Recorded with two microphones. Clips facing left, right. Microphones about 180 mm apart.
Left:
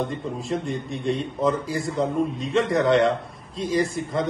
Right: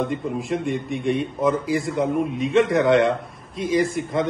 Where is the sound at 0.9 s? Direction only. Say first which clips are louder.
Right 1 dB; centre (ahead or behind).